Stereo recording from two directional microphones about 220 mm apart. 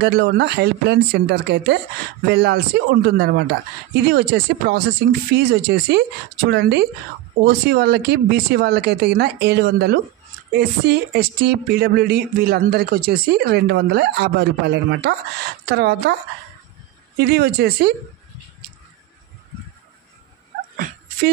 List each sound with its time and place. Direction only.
0.0 s speech: 55° right (ahead or behind)
17.2 s speech: 45° right (ahead or behind)
20.7 s a sound: 40° right (ahead or behind)